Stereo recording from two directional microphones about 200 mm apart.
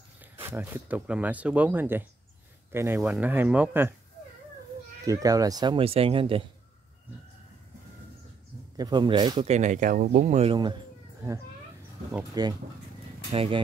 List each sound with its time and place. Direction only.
0.2 s speech: 10° right (ahead or behind)
5.0 s speech: 15° right (ahead or behind)
8.7 s speech: 20° right (ahead or behind)
9.5 s speech: 35° right (ahead or behind)
12.1 s speech: 15° right (ahead or behind)
13.3 s speech: 25° right (ahead or behind)